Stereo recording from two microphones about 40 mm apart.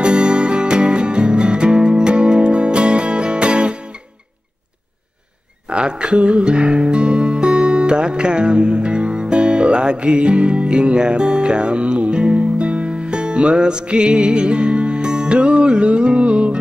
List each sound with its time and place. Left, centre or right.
0.0 s music: right
5.7 s music: right